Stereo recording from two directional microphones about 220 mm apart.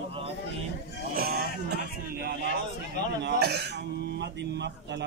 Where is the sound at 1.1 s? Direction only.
45° right (ahead or behind).